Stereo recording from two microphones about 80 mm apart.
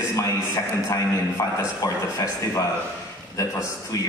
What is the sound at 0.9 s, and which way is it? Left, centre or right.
A man's voice, left.